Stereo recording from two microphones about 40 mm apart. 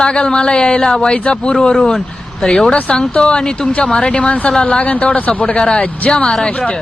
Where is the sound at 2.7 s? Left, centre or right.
Left.